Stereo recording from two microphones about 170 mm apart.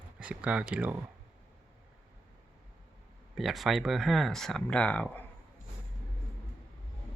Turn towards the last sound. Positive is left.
turn(degrees=10)  # may be behind; listen again after turning